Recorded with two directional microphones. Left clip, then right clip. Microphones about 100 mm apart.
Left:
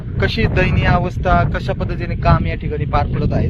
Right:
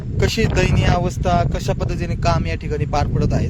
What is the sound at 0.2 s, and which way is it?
Speech, 40° right (ahead or behind).